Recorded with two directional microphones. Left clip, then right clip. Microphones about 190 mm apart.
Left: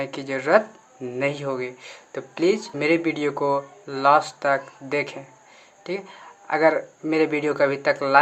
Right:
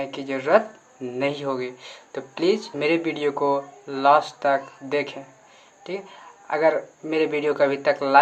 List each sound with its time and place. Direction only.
0.0 s speech: 15° left (ahead or behind)